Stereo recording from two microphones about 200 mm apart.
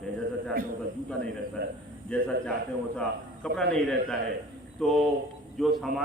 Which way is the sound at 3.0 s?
5° left (ahead or behind).